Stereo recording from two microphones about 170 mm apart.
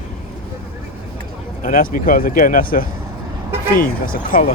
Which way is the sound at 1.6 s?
55° left (ahead or behind).